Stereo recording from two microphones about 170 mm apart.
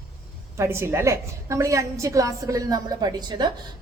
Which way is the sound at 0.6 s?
15° right (ahead or behind).